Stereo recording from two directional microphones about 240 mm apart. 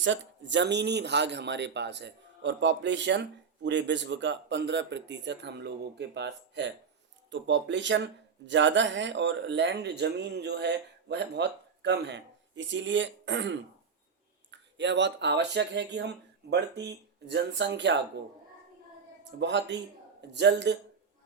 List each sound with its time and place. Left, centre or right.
0.0 s speech: right
19.2 s speech: right